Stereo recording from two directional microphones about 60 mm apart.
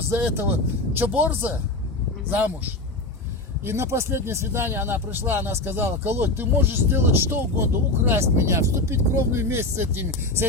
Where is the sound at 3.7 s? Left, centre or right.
Right.